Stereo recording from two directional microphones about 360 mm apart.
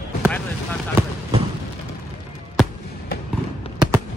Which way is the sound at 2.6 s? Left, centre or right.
Centre.